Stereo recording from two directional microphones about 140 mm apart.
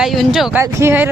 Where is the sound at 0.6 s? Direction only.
20° right (ahead or behind).